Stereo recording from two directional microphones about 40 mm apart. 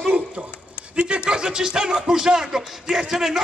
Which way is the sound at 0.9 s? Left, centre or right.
Right.